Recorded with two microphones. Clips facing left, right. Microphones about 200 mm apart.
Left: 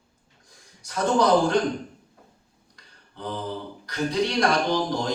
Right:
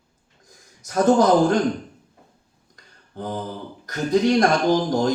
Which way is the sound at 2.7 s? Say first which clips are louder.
Right 9 dB; 45° right (ahead or behind).